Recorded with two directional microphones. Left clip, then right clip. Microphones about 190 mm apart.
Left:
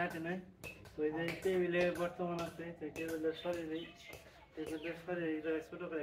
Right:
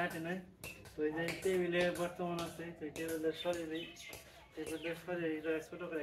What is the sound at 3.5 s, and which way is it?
Speech, 5° left (ahead or behind).